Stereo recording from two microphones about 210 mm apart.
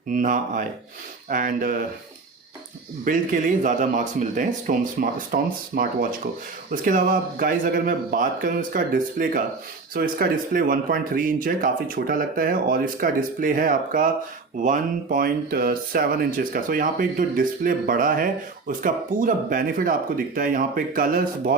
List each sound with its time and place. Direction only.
0.1 s speech: 40° right (ahead or behind)
3.0 s speech: 40° right (ahead or behind)